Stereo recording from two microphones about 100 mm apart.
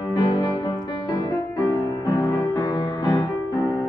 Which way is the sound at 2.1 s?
40° left (ahead or behind).